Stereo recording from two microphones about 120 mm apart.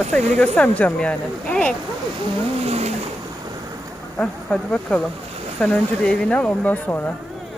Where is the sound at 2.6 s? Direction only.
60° right (ahead or behind).